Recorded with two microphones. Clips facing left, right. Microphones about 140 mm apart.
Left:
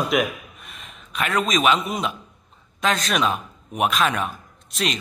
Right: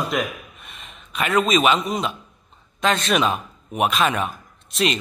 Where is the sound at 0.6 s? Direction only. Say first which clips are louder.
Even; centre (ahead or behind).